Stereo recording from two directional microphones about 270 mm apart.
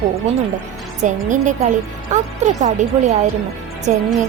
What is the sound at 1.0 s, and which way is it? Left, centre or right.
A woman's voice, right.